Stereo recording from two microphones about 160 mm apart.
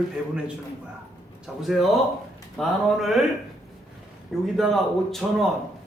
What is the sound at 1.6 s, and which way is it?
A man's voice, centre (ahead or behind).